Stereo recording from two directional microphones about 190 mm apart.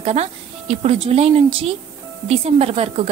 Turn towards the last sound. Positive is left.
turn(degrees=-30)  # may be behind; listen again after turning